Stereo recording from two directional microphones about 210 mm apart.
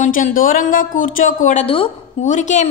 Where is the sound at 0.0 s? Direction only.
40° left (ahead or behind).